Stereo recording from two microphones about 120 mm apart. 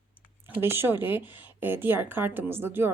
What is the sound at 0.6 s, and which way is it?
A woman's voice, 20° right (ahead or behind).